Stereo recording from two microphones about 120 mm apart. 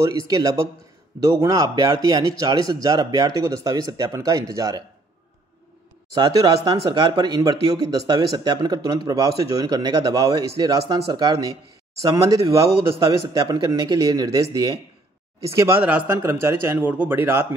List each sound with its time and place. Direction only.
0.0 s a man's voice: 30° right (ahead or behind)
6.1 s a man's voice: 35° right (ahead or behind); by 17.5 s 20° right (ahead or behind)